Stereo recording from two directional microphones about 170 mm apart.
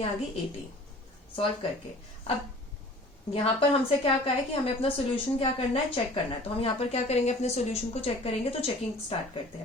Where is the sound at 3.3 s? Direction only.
35° left (ahead or behind).